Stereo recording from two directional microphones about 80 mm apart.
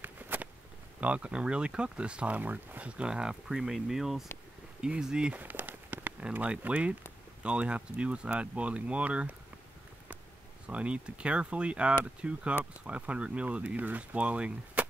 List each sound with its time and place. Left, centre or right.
0.0 s a sound: right
1.0 s speech: centre
5.4 s speech: right
10.7 s speech: centre